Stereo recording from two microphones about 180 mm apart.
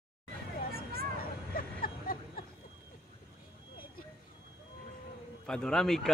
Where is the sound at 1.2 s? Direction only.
55° left (ahead or behind).